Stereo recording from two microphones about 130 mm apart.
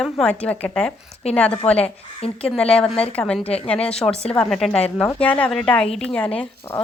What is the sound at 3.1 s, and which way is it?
A woman's voice, 5° left (ahead or behind).